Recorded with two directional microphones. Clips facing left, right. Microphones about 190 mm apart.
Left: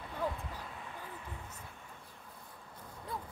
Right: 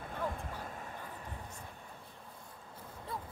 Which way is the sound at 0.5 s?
45° right (ahead or behind).